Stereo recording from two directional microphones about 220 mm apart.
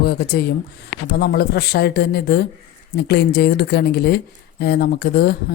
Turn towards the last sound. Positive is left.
turn(degrees=45)  # may be behind; listen again after turning